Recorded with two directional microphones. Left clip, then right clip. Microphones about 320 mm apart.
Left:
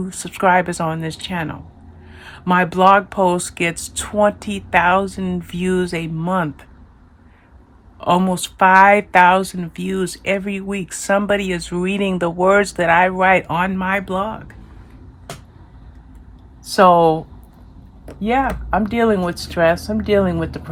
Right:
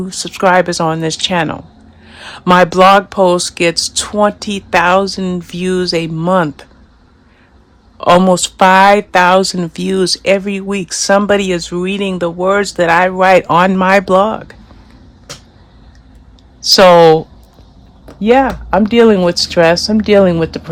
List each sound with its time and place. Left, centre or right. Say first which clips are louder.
0.0 s speech: right 5 dB; centre
7.9 s speech: right 9 dB; centre
16.7 s speech: right 7 dB; right
18.2 s speech: right 8 dB; right